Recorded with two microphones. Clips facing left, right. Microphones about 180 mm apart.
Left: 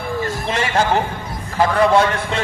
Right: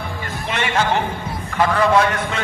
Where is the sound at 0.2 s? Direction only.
35° left (ahead or behind).